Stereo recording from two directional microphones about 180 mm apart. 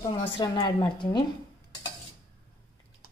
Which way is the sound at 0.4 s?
25° left (ahead or behind).